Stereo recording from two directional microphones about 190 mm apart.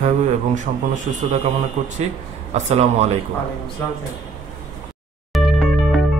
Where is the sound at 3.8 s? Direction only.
10° left (ahead or behind).